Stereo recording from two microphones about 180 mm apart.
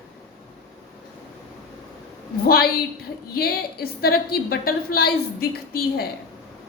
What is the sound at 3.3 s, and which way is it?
A woman's voice, 60° left (ahead or behind).